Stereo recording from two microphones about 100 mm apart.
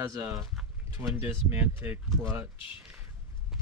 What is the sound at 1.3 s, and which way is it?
Speech, 20° right (ahead or behind).